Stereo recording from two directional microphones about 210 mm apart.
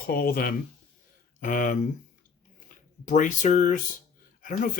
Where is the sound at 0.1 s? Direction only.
45° left (ahead or behind).